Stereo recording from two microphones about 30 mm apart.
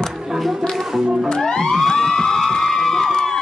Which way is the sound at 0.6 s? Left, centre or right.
Right.